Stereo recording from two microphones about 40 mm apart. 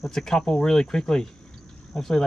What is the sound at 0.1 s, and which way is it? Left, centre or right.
Speech, centre.